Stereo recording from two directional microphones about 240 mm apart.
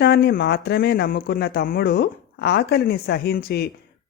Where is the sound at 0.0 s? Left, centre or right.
Left.